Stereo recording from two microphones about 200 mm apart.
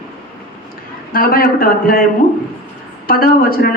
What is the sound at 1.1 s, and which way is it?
Speech, 45° left (ahead or behind).